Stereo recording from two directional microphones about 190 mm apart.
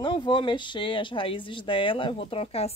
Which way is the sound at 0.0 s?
25° left (ahead or behind).